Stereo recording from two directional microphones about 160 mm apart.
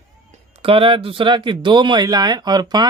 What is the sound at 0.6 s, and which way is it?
Speech, 35° right (ahead or behind).